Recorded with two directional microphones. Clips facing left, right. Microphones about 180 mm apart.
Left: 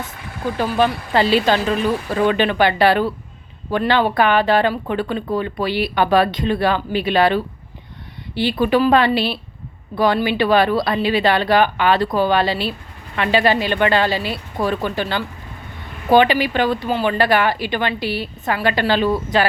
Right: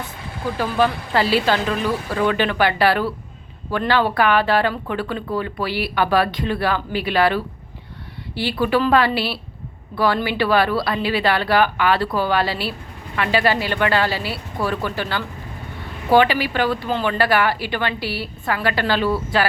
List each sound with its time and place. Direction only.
0.8 s speech: 20° left (ahead or behind)